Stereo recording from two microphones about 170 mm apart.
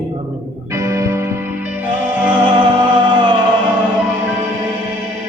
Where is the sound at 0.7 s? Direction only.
15° right (ahead or behind).